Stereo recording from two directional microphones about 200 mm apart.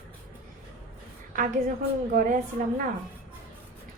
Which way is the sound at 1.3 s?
40° right (ahead or behind).